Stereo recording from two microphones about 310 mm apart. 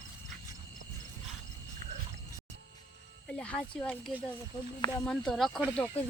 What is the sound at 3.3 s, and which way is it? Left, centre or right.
Speech, centre.